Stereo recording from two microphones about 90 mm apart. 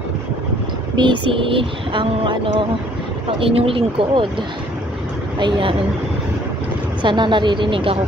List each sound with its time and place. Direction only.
0.9 s speech: 65° right (ahead or behind)
3.3 s speech: 90° right
5.4 s speech: 75° right (ahead or behind)
7.0 s speech: 60° right (ahead or behind); by 8.0 s 80° right